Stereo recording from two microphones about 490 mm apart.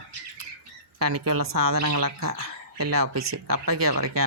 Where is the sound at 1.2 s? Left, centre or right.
Right.